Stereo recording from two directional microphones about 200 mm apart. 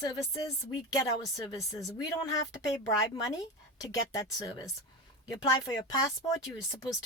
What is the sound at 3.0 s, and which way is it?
Speech, 15° left (ahead or behind).